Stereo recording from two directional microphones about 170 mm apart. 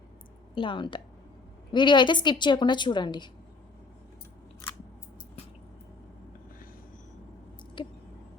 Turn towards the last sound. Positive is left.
turn(degrees=30)  # may be behind; listen again after turning